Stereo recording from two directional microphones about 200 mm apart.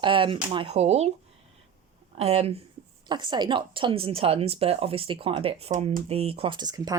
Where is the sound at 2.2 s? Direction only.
30° right (ahead or behind).